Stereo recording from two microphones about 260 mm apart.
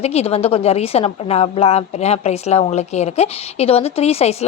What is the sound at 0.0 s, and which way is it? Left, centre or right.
A woman's voice, left.